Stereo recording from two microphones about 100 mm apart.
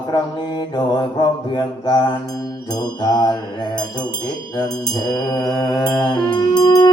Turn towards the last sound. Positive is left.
turn(degrees=50)  # may be behind; listen again after turning